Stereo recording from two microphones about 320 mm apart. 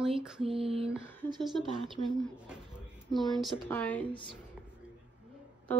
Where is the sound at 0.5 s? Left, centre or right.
Centre.